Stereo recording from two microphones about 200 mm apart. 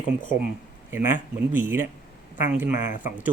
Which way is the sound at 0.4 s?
10° right (ahead or behind).